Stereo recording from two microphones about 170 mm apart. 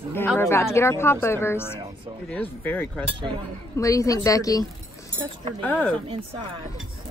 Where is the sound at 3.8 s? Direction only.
20° left (ahead or behind).